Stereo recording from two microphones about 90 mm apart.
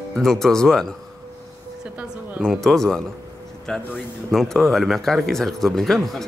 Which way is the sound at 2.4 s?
5° left (ahead or behind).